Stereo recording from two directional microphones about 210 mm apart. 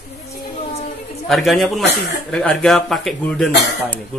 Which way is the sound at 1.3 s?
Centre (ahead or behind).